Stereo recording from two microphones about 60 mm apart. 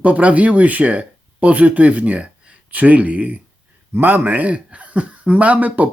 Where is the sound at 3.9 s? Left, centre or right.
Right.